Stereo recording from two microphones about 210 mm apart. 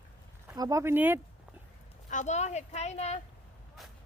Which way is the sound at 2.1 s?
35° left (ahead or behind).